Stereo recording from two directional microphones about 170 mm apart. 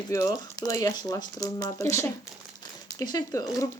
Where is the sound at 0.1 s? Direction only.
20° left (ahead or behind).